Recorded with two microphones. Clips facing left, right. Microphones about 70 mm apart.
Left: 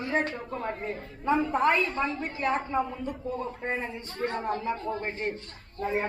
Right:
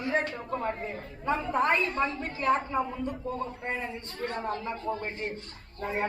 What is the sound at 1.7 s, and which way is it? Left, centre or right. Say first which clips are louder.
A woman's voice: left 1 dB; centre.